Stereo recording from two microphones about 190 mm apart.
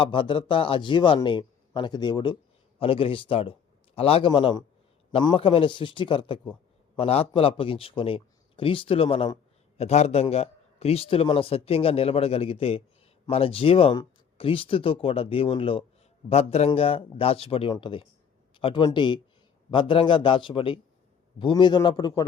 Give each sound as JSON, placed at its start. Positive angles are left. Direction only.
{"t": 0.0, "sound": "a man's voice", "side_deg": 25}